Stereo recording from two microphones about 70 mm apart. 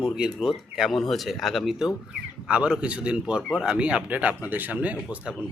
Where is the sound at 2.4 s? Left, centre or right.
Centre.